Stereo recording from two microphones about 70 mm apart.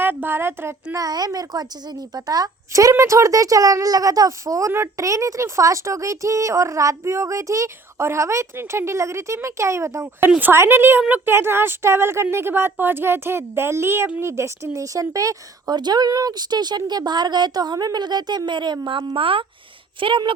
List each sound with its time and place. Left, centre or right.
0.0 s speech: right
0.9 s a woman's voice: right
3.0 s speech: right
15.7 s a woman's voice: right